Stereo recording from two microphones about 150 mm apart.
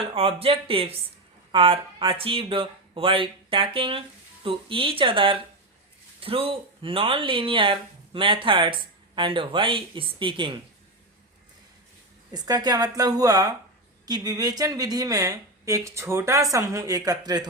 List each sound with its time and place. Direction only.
0.1 s speech: 35° right (ahead or behind)
12.3 s speech: 25° right (ahead or behind)